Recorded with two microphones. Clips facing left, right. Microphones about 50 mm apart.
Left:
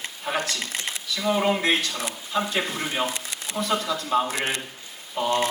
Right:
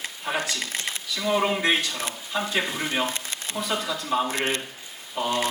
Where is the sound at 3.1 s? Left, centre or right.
Right.